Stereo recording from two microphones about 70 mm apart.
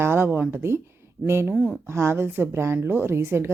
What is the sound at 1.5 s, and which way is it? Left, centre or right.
Speech, centre.